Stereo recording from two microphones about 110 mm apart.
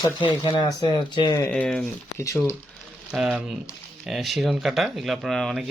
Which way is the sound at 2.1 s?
30° left (ahead or behind).